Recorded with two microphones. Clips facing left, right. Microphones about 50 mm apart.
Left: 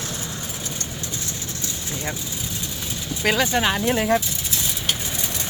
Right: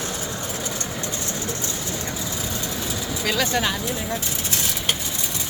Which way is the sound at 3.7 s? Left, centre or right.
Left.